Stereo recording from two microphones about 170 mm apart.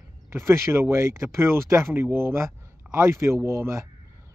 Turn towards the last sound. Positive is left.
turn(degrees=-15)  # may be behind; listen again after turning